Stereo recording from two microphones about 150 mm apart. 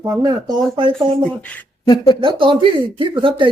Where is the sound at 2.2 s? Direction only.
35° right (ahead or behind).